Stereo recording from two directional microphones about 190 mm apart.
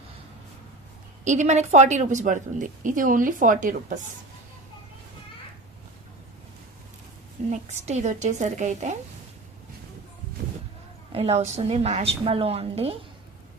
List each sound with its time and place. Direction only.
1.2 s a woman's voice: 40° right (ahead or behind)
7.5 s a woman's voice: 35° right (ahead or behind)
11.1 s a woman's voice: 35° right (ahead or behind)